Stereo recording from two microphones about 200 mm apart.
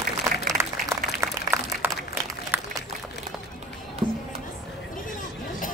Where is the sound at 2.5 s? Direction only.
10° right (ahead or behind).